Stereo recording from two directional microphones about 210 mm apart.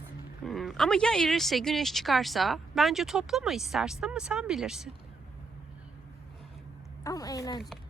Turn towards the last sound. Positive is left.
turn(degrees=15)  # may be behind; listen again after turning